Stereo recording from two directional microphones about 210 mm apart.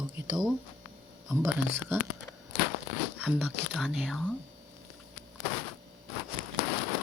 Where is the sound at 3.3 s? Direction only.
5° right (ahead or behind).